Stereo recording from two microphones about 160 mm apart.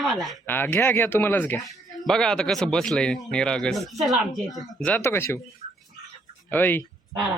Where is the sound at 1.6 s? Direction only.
Centre (ahead or behind).